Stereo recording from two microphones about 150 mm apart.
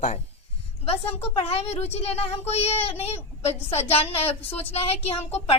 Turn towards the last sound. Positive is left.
turn(degrees=40)  # may be behind; listen again after turning